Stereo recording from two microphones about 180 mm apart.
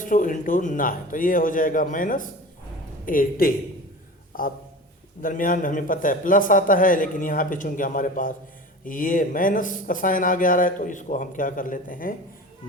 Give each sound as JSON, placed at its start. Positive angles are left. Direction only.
{"t": 0.0, "sound": "a man's voice", "side_deg": 45}